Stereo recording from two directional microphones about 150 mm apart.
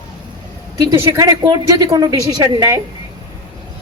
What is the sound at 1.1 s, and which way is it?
A woman's voice, 25° right (ahead or behind).